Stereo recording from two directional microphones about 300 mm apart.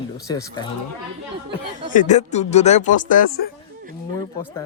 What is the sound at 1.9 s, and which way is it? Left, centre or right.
A man's voice, left.